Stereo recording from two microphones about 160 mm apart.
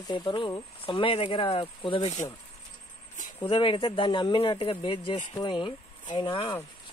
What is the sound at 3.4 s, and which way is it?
Speech, 30° left (ahead or behind).